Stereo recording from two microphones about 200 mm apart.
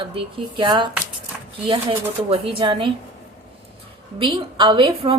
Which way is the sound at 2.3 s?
25° right (ahead or behind).